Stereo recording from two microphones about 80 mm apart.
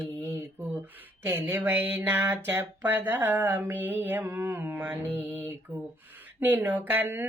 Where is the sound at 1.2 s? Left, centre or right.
Right.